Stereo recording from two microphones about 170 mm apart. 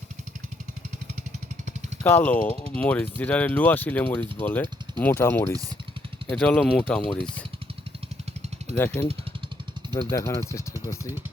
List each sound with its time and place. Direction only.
2.0 s speech: 10° left (ahead or behind)
8.7 s speech: 10° left (ahead or behind)